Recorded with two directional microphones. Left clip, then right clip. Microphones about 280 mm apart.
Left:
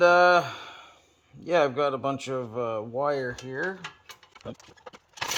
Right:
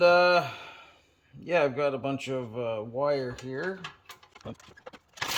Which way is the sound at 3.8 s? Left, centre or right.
Centre.